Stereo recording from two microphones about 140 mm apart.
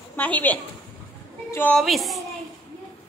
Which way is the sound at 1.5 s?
15° left (ahead or behind).